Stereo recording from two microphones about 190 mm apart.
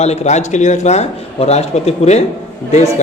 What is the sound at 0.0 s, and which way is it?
A man's voice, 35° left (ahead or behind).